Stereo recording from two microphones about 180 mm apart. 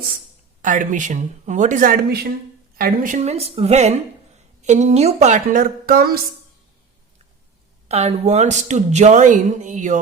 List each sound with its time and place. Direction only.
0.6 s speech: 45° right (ahead or behind)
7.9 s speech: 35° right (ahead or behind)